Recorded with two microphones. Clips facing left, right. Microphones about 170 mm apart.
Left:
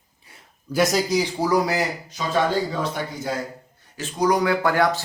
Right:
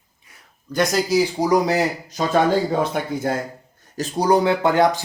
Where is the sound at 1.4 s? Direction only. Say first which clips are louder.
Right 3 dB; 20° right (ahead or behind).